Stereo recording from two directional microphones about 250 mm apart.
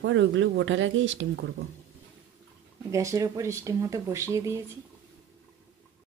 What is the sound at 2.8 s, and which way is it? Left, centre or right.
Speech, centre.